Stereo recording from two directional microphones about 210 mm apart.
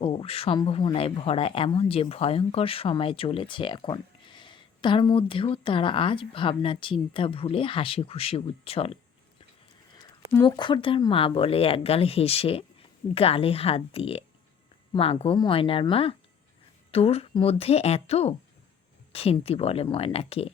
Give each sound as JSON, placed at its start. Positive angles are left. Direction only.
{"t": 0.0, "sound": "speech", "side_deg": 25}
{"t": 10.4, "sound": "speech", "side_deg": 25}